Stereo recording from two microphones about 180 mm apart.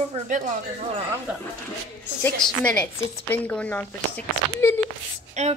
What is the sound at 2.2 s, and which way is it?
A woman's voice, 10° left (ahead or behind).